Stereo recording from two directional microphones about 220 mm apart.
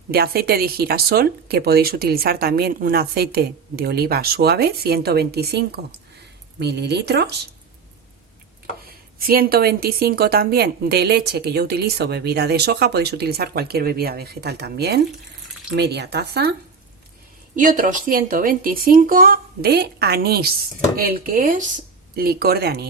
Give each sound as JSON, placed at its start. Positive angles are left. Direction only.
{"t": 0.1, "sound": "speech", "side_deg": -45}
{"t": 9.2, "sound": "speech", "side_deg": -45}
{"t": 17.5, "sound": "speech", "side_deg": -35}